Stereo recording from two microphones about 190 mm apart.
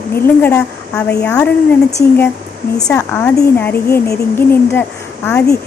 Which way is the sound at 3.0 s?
15° left (ahead or behind).